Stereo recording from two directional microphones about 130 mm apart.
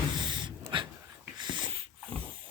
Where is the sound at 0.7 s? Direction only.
35° right (ahead or behind).